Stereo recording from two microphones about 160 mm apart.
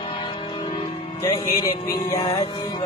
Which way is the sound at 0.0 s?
35° left (ahead or behind).